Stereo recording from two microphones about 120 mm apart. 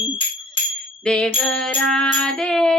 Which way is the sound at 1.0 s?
5° left (ahead or behind).